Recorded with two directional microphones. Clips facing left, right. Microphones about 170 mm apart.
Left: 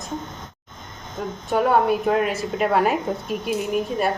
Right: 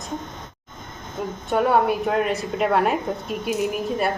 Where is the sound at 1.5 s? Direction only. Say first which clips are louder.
Left 1 dB; centre (ahead or behind).